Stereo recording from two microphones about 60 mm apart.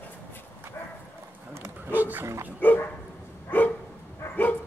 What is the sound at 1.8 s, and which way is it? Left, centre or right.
Dog, right.